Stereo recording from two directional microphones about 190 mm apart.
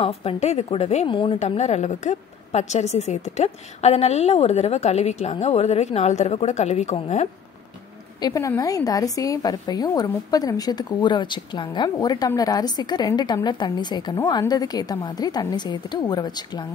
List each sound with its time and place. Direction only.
0.0 s a woman's voice: 30° left (ahead or behind)
8.2 s a woman's voice: 20° left (ahead or behind)